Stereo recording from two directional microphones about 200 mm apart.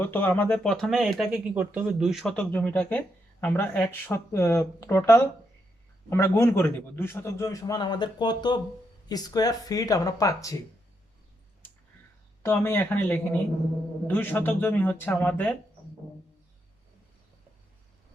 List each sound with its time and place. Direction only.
0.0 s a man's voice: 10° left (ahead or behind)
12.4 s a man's voice: 10° left (ahead or behind)